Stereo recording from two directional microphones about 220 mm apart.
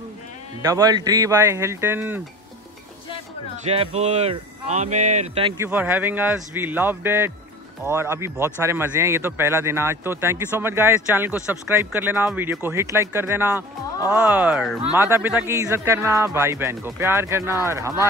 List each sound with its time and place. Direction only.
0.6 s speech: 15° right (ahead or behind)
3.6 s speech: 30° right (ahead or behind)
5.6 s speech: 10° right (ahead or behind)